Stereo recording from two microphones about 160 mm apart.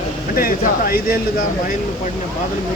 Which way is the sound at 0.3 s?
65° left (ahead or behind).